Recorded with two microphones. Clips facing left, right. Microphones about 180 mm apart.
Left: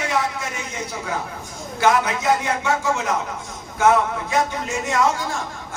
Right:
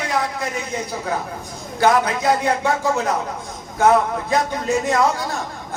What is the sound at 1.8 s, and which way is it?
A man's voice, 35° right (ahead or behind).